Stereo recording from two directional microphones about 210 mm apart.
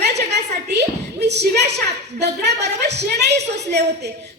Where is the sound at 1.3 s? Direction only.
50° right (ahead or behind).